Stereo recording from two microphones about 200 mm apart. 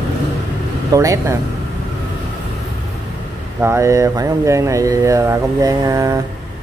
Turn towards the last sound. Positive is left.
turn(degrees=-15)  # may be behind; listen again after turning